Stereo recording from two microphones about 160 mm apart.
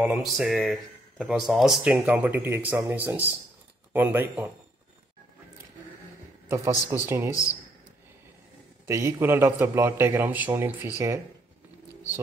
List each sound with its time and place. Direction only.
0.0 s speech: 5° right (ahead or behind)
6.5 s speech: 15° right (ahead or behind)
8.8 s speech: 15° right (ahead or behind)